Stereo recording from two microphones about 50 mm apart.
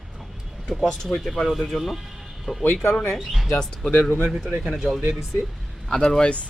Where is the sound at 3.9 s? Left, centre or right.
Left.